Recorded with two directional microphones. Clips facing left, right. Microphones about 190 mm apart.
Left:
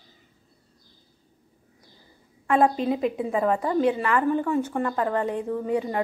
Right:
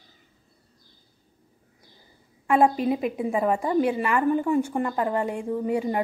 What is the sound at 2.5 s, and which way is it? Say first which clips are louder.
A woman's voice: right 1 dB; 10° right (ahead or behind).